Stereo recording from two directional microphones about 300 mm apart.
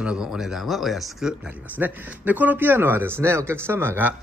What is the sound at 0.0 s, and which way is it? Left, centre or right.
A man's voice, centre.